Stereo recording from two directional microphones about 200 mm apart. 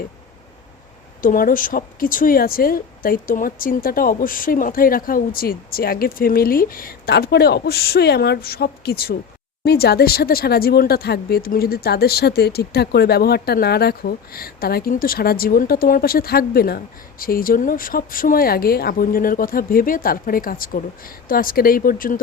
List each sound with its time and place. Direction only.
1.2 s speech: 45° left (ahead or behind)